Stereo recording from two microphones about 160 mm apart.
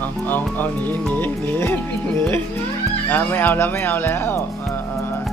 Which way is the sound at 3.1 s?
10° left (ahead or behind).